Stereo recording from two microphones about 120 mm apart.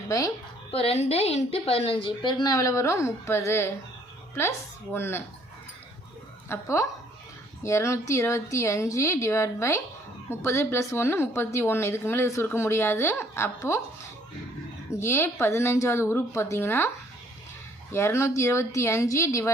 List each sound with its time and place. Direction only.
0.7 s a woman's voice: 55° left (ahead or behind); by 5.2 s 20° left (ahead or behind)
6.5 s a woman's voice: 25° left (ahead or behind)
14.8 s a woman's voice: 20° left (ahead or behind)
17.9 s a woman's voice: 20° left (ahead or behind)